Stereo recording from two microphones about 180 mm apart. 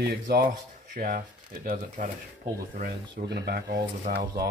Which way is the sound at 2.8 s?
65° right (ahead or behind).